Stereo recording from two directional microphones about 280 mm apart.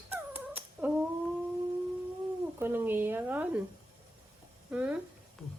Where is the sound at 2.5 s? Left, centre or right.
Centre.